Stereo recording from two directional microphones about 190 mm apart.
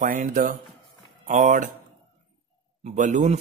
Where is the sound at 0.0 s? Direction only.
45° right (ahead or behind).